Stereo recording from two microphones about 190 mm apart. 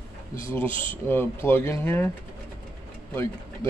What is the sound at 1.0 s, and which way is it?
Speech, 10° left (ahead or behind).